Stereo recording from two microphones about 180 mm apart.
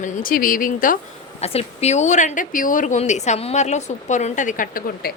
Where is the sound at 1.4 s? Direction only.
35° left (ahead or behind).